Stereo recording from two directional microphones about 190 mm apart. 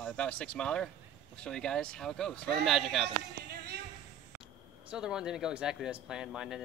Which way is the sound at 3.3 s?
55° right (ahead or behind).